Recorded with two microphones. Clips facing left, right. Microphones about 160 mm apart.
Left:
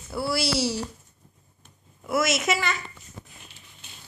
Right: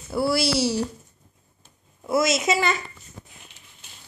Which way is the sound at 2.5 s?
35° right (ahead or behind).